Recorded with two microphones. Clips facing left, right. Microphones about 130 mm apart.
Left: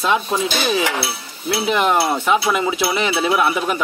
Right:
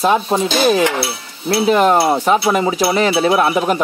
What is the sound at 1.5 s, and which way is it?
Speech, 40° right (ahead or behind).